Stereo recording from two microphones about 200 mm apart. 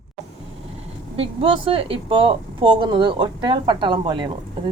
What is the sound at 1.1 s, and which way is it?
Speech, 30° right (ahead or behind).